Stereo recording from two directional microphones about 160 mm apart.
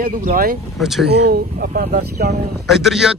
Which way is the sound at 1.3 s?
65° right (ahead or behind).